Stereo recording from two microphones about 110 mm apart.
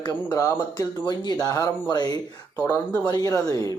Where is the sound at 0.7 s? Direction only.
40° left (ahead or behind).